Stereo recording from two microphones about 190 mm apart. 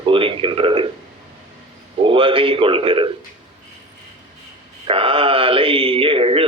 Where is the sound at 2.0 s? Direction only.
30° right (ahead or behind).